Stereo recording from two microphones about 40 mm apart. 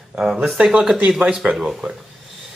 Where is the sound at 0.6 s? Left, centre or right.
Centre.